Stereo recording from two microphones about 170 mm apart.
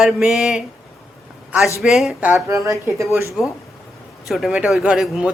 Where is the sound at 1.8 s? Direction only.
Centre (ahead or behind); by 3.3 s 15° right (ahead or behind).